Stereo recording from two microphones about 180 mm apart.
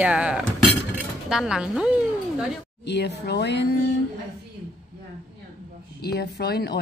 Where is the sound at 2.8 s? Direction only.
70° left (ahead or behind).